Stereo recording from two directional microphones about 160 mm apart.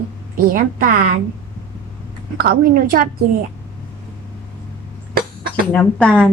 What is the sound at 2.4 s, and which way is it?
Speech, 65° right (ahead or behind).